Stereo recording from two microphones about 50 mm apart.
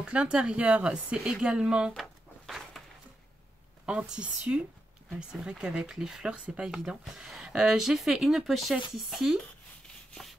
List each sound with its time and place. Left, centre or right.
0.0 s speech: right
2.0 s a sound: centre
3.8 s speech: right; by 9.3 s centre